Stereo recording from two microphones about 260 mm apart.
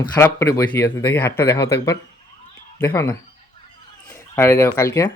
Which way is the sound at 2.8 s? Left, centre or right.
Centre.